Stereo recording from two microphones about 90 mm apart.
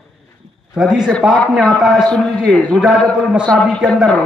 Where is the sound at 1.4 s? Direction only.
10° left (ahead or behind).